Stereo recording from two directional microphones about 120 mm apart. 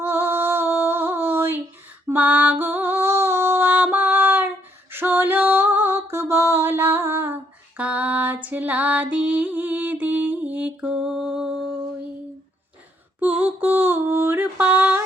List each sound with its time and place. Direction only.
0.0 s female singing: 20° right (ahead or behind)
2.0 s music: 15° right (ahead or behind)
7.8 s female singing: 10° right (ahead or behind)
8.4 s music: 10° right (ahead or behind)
13.1 s mantra: 15° right (ahead or behind)